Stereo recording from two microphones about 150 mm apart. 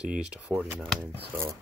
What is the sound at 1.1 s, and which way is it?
Speech, 15° right (ahead or behind).